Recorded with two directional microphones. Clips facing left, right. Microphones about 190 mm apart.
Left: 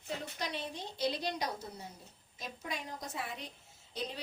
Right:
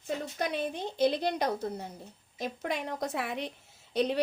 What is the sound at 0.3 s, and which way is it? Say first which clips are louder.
A woman's voice: right 8 dB; 55° right (ahead or behind).